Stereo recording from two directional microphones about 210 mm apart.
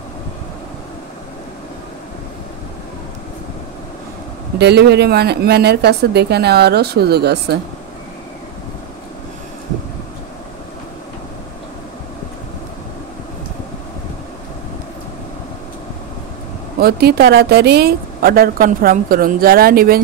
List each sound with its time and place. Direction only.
4.6 s a woman's voice: 50° right (ahead or behind)
16.8 s a woman's voice: 50° right (ahead or behind)